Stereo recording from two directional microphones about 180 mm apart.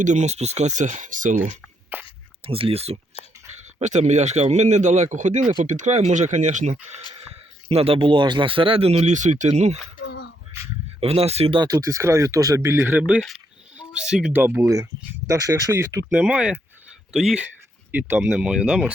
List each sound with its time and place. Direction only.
0.0 s speech: 40° right (ahead or behind)
1.9 s speech: 10° right (ahead or behind)
2.4 s speech: 30° right (ahead or behind)
10.0 s a sound: 65° left (ahead or behind)
11.0 s speech: 35° right (ahead or behind); by 16.0 s 15° right (ahead or behind)
16.0 s speech: 5° right (ahead or behind)